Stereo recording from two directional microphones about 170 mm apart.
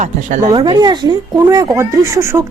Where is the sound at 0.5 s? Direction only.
25° right (ahead or behind).